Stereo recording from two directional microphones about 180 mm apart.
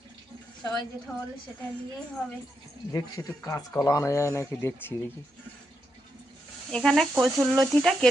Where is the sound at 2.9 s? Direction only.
20° left (ahead or behind).